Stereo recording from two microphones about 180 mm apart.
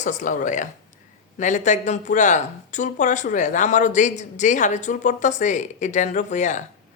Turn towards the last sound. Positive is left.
turn(degrees=45)  # may be behind; listen again after turning